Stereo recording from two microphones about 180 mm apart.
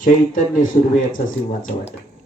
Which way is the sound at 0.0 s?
45° left (ahead or behind).